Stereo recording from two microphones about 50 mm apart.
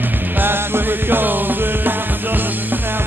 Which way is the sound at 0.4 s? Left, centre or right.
Right.